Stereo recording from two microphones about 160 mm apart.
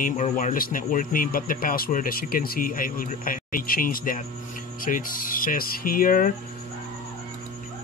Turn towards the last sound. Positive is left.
turn(degrees=60)  # may be behind; listen again after turning